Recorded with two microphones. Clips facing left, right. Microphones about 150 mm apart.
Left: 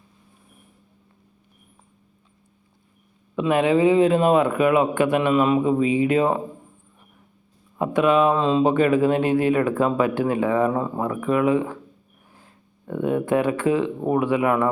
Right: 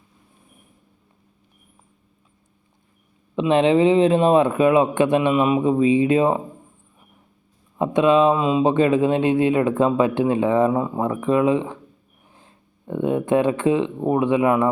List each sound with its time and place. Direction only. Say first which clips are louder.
3.3 s speech: right 2 dB; 25° right (ahead or behind)
7.8 s speech: right 2 dB; 20° right (ahead or behind)